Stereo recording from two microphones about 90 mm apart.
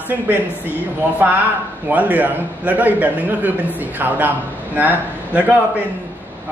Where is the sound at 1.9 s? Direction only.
15° right (ahead or behind).